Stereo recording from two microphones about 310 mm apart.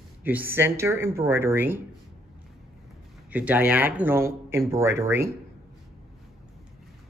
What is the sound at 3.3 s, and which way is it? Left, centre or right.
Speech, centre.